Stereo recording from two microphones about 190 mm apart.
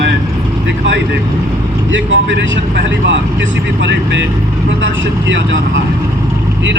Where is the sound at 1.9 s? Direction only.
75° right (ahead or behind).